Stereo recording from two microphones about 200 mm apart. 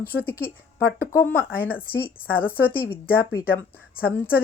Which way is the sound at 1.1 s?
10° left (ahead or behind).